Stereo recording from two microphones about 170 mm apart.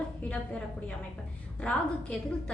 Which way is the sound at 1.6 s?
5° left (ahead or behind).